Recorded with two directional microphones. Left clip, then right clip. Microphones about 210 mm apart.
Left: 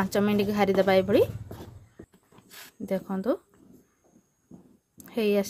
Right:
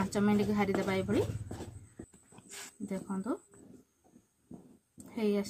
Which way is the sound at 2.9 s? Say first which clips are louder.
Left 11 dB; 50° left (ahead or behind).